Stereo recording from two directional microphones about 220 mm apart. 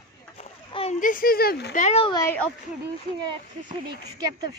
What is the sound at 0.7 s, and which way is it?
Speech, 30° left (ahead or behind).